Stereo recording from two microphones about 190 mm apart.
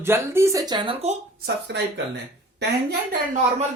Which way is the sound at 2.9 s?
45° right (ahead or behind).